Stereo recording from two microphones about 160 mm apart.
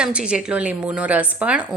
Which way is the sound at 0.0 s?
5° right (ahead or behind).